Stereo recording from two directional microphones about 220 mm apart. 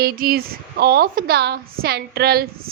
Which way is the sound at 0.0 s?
40° right (ahead or behind).